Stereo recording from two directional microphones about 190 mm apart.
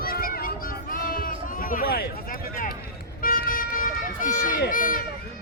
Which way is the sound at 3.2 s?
50° left (ahead or behind).